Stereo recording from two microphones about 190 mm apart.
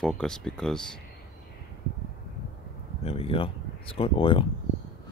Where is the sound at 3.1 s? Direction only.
30° left (ahead or behind).